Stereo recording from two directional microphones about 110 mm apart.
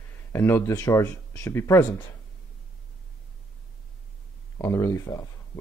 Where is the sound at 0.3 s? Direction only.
20° left (ahead or behind).